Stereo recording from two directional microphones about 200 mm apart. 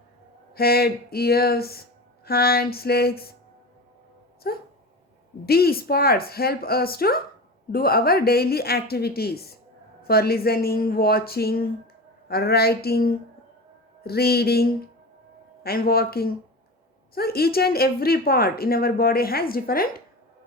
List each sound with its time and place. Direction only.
0.5 s speech: 50° left (ahead or behind)
4.4 s speech: 50° left (ahead or behind)